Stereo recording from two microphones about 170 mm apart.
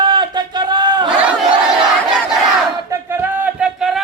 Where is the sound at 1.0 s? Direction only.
5° right (ahead or behind).